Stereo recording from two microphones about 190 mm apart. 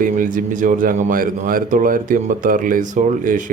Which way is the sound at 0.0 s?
45° right (ahead or behind).